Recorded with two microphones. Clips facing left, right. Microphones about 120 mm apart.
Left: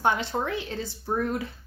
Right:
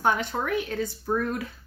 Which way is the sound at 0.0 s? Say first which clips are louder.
Even; 25° left (ahead or behind).